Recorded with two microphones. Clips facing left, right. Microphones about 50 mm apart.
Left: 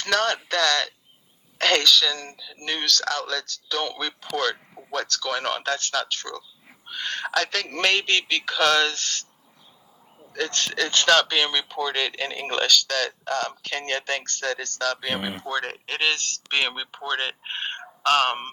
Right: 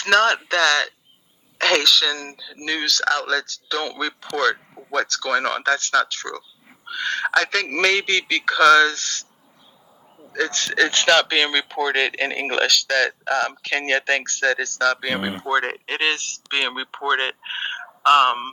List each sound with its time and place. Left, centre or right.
0.0 s a man's voice: right
2.4 s speech: right
3.1 s a man's voice: right
6.8 s speech: right
10.8 s a man's voice: right
15.1 s speech: right; by 16.7 s centre
16.7 s speech: right
17.4 s speech: centre